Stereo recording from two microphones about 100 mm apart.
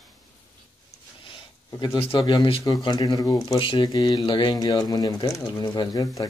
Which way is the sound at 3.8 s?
40° left (ahead or behind).